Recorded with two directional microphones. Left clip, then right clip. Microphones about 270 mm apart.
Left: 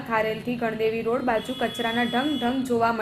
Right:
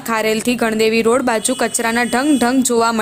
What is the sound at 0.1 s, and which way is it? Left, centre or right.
A woman's voice, right.